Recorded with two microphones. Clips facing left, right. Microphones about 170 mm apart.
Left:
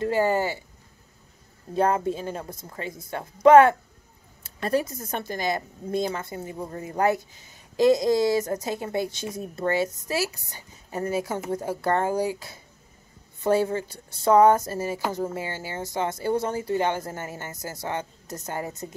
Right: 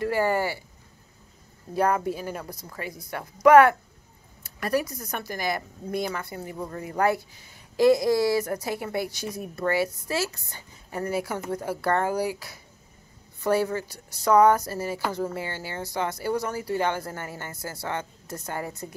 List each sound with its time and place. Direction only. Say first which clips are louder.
0.0 s speech: left 1 dB; 20° left (ahead or behind)
1.7 s a woman's voice: left 1 dB; 25° left (ahead or behind)